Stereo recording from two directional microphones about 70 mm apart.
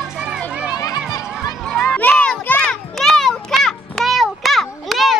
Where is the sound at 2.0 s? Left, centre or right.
Left.